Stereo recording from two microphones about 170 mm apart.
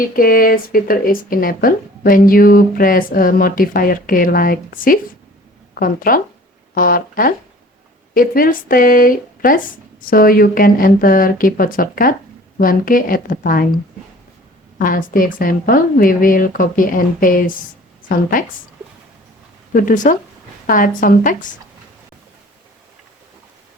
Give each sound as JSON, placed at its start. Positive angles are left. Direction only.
{"t": 0.2, "sound": "speech", "side_deg": 60}
{"t": 14.8, "sound": "speech", "side_deg": 55}
{"t": 19.7, "sound": "speech", "side_deg": 50}